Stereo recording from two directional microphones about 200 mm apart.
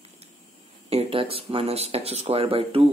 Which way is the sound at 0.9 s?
30° right (ahead or behind).